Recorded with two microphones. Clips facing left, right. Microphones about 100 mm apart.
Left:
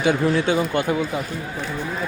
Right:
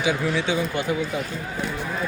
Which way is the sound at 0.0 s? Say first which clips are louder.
Left 4 dB; 55° left (ahead or behind).